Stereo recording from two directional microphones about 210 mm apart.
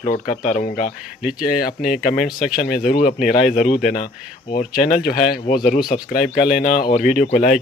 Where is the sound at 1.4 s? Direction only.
45° left (ahead or behind).